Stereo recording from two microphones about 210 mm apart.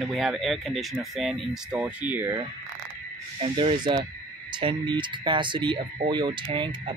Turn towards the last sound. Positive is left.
turn(degrees=-25)  # may be behind; listen again after turning